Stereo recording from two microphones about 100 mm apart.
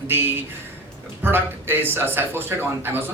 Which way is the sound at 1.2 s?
20° right (ahead or behind).